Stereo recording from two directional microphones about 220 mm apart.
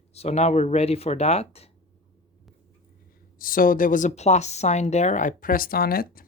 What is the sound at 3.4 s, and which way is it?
Speech, 40° left (ahead or behind).